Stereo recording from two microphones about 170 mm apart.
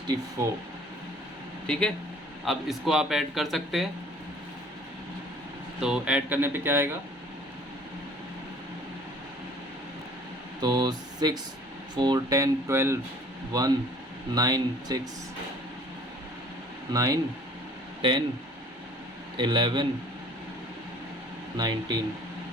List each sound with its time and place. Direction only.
0.4 s speech: 15° right (ahead or behind)
1.6 s a man's voice: 5° left (ahead or behind)
5.8 s speech: 5° right (ahead or behind)
10.6 s speech: 25° right (ahead or behind)
16.9 s speech: 20° right (ahead or behind)
19.4 s speech: 25° right (ahead or behind)
21.6 s speech: 25° right (ahead or behind)